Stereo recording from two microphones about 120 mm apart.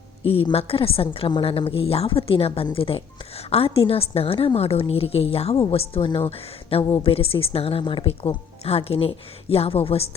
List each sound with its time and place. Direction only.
0.3 s a woman's voice: 50° left (ahead or behind)